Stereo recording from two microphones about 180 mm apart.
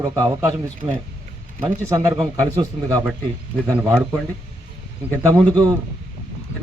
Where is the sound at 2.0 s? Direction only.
20° right (ahead or behind).